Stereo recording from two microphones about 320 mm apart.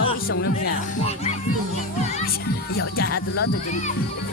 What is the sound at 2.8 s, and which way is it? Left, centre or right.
Music, left.